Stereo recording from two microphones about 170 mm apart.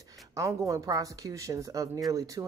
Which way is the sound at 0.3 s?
20° right (ahead or behind).